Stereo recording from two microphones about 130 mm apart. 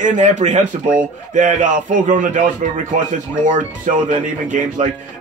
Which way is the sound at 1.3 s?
80° right.